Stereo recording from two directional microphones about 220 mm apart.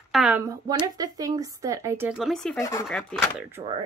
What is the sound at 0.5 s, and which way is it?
A woman's voice, 15° right (ahead or behind).